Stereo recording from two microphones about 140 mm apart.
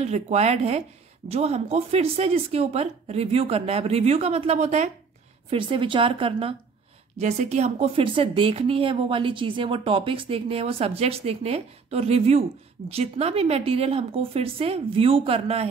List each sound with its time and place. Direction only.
0.0 s a woman's voice: 50° right (ahead or behind)
5.5 s speech: 35° right (ahead or behind)
7.2 s a woman's voice: 55° right (ahead or behind)